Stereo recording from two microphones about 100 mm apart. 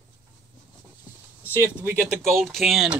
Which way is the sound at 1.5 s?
25° right (ahead or behind).